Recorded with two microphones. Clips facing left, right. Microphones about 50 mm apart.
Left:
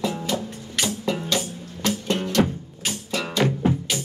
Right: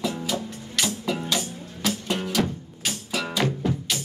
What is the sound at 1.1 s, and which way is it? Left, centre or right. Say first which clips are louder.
Music: left 2 dB; centre.